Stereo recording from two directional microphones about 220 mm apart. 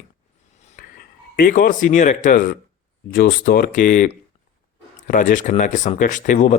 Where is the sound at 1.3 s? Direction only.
40° left (ahead or behind).